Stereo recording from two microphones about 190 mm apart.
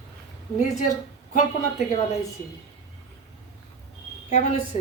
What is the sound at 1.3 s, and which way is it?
Speech, 35° left (ahead or behind).